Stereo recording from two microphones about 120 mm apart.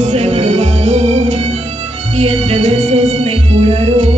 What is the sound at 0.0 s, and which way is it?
Music, 65° right (ahead or behind).